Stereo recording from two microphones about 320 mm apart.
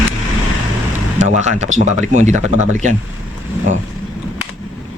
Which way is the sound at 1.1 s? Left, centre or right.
Right.